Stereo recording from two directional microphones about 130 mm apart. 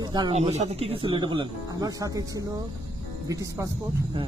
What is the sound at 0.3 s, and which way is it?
Speech, 55° right (ahead or behind).